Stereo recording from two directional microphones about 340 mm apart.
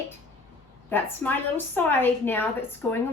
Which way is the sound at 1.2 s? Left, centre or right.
Centre.